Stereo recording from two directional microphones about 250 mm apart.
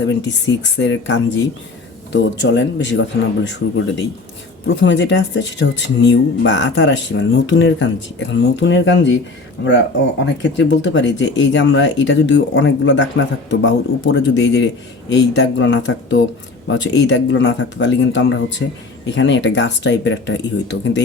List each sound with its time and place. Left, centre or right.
0.0 s speech: left